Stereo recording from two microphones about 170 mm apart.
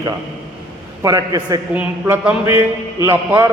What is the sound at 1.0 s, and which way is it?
Speech, 20° right (ahead or behind).